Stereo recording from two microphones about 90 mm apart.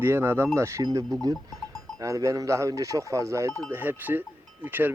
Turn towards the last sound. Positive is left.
turn(degrees=-20)  # may be behind; listen again after turning